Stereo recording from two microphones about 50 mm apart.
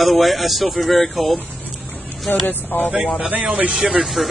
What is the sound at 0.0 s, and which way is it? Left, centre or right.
Speech, centre.